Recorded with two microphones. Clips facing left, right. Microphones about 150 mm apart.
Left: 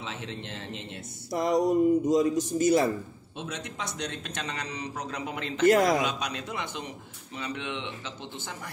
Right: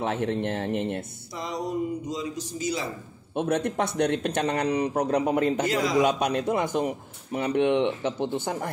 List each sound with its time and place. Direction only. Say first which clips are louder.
0.0 s a man's voice: right 12 dB; 55° right (ahead or behind)
1.3 s a man's voice: left 7 dB; 50° left (ahead or behind)
3.3 s a man's voice: right 12 dB; 55° right (ahead or behind)
5.2 s a man's voice: right 11 dB; 40° right (ahead or behind)
5.7 s a man's voice: left 5 dB; 55° left (ahead or behind)
6.0 s a man's voice: right 9 dB; 55° right (ahead or behind)